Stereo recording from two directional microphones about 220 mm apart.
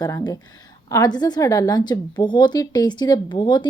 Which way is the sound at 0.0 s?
15° left (ahead or behind).